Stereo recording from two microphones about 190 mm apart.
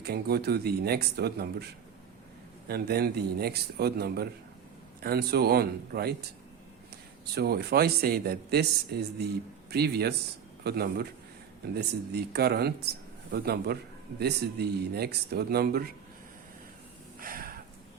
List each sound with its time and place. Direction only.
0.0 s speech: 55° right (ahead or behind)
2.6 s speech: 55° right (ahead or behind)
7.3 s speech: 55° right (ahead or behind)
17.2 s a sound: 50° right (ahead or behind)